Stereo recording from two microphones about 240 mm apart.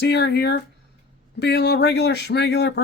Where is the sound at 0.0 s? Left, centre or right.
Left.